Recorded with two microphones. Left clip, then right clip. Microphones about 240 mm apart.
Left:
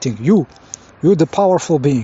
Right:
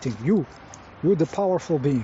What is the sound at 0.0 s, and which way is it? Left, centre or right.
Speech, left.